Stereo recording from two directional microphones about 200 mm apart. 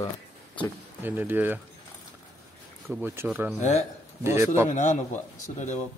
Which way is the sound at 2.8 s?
10° right (ahead or behind).